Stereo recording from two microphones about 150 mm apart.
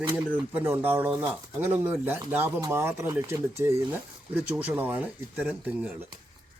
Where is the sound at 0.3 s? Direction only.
10° right (ahead or behind).